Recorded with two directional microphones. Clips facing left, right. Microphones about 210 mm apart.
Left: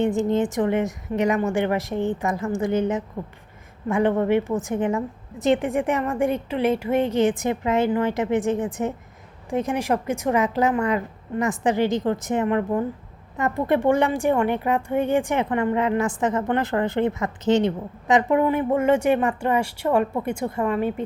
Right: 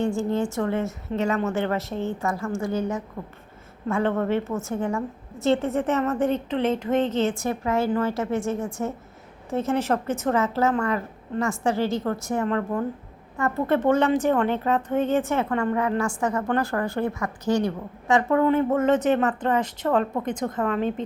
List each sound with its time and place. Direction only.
0.0 s a woman's voice: 20° left (ahead or behind)